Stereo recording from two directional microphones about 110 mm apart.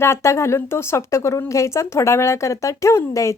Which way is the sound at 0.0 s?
25° left (ahead or behind).